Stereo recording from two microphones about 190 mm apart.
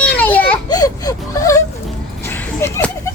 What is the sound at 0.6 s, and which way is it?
Speech, 20° left (ahead or behind).